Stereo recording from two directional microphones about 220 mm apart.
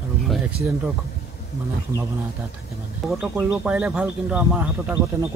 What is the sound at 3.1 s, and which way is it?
Speech, 5° right (ahead or behind).